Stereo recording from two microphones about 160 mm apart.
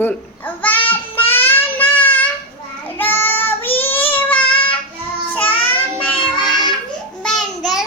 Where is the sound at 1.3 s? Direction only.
15° left (ahead or behind).